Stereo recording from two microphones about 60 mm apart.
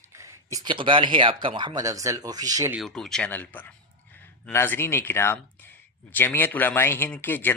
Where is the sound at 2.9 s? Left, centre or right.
Centre.